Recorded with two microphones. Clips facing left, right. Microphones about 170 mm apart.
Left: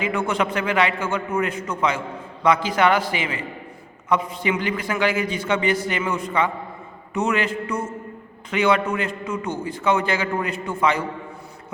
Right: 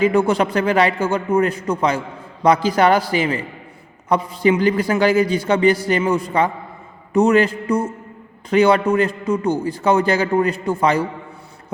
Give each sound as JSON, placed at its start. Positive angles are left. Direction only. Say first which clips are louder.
{"t": 0.0, "sound": "a man's voice", "louder": "right 7 dB", "side_deg": -35}